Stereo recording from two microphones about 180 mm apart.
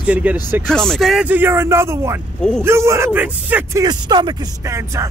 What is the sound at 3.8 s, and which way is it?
Speech, 25° right (ahead or behind).